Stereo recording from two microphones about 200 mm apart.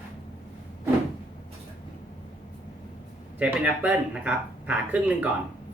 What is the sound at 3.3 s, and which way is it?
Speech, 10° right (ahead or behind).